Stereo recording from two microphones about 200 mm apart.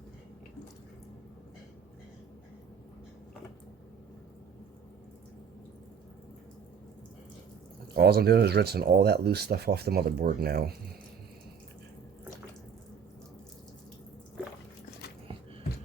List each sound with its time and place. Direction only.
7.9 s speech: 50° right (ahead or behind)